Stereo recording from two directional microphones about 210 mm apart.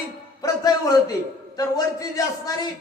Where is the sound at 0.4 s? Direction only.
15° left (ahead or behind).